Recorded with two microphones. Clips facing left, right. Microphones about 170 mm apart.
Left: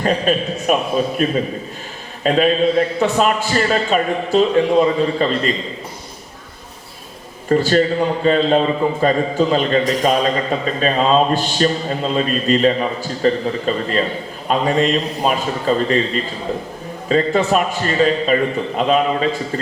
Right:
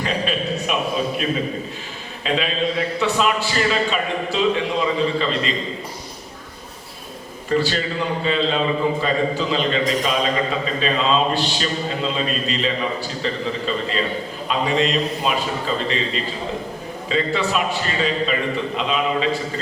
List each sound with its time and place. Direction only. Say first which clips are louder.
0.0 s a man's voice: left 6 dB; 45° left (ahead or behind)
7.5 s a man's voice: left 6 dB; 45° left (ahead or behind)